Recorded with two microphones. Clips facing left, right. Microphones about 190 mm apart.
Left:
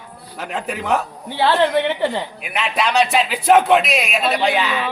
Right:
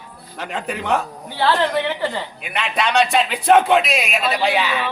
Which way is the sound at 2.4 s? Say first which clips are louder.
Even; centre (ahead or behind).